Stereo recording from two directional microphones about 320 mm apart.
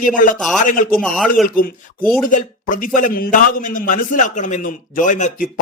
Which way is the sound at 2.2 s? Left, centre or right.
Left.